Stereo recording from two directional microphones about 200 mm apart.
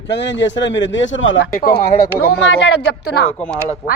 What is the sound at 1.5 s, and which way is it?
A woman's voice, 45° left (ahead or behind).